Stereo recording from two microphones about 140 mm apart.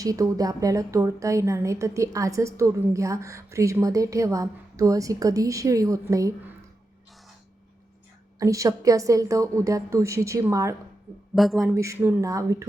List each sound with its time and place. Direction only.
0.0 s a woman's voice: 25° right (ahead or behind)
8.4 s a woman's voice: 20° right (ahead or behind)
11.3 s speech: centre (ahead or behind)
11.7 s a woman's voice: 20° right (ahead or behind)